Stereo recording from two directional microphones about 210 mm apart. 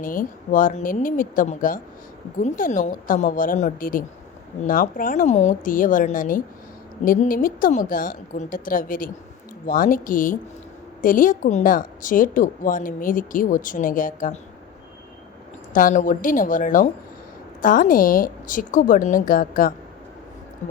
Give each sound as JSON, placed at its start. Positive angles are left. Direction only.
{"t": 0.0, "sound": "speech", "side_deg": 40}
{"t": 15.7, "sound": "speech", "side_deg": 40}